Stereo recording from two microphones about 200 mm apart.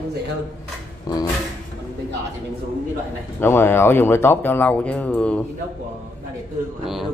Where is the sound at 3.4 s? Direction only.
10° left (ahead or behind).